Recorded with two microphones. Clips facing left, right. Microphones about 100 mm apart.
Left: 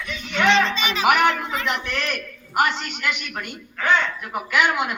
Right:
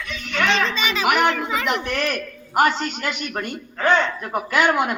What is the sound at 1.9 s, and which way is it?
A man's voice, 40° right (ahead or behind).